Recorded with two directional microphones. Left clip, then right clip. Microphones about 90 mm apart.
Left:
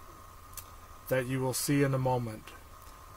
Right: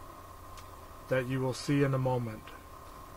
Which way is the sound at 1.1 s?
20° left (ahead or behind).